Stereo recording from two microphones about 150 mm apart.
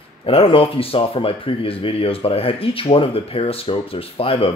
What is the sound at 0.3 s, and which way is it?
Speech, 40° left (ahead or behind).